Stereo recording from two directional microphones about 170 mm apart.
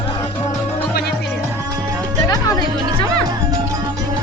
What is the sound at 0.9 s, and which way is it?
Music, 65° left (ahead or behind).